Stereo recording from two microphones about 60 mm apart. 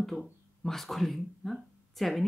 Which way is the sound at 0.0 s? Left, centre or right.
Centre.